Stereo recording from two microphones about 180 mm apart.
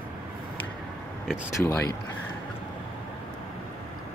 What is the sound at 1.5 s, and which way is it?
Speech, 15° left (ahead or behind).